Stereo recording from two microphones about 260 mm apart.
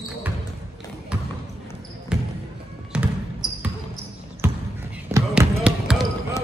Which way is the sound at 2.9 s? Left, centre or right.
Centre.